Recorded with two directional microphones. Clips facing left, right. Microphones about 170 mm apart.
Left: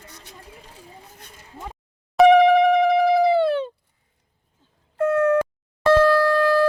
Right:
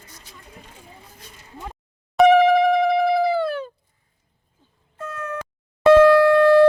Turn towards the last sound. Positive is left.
turn(degrees=-20)  # may be behind; listen again after turning